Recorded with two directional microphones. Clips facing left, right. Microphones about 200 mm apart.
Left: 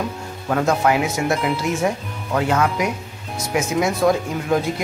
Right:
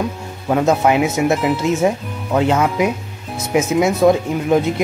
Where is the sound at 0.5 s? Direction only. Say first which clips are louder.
Right 4 dB; 20° right (ahead or behind).